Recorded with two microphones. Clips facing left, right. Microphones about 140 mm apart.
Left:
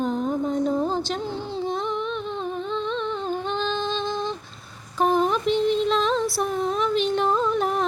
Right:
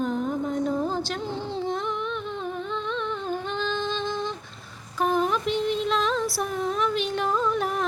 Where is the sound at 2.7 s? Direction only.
25° left (ahead or behind).